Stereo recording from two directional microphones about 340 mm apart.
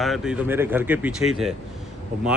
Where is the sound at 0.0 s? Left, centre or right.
Centre.